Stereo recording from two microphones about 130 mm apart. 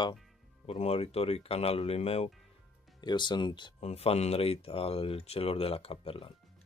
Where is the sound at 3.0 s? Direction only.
35° left (ahead or behind).